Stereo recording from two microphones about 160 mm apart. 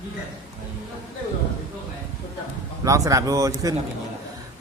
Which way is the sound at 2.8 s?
20° right (ahead or behind).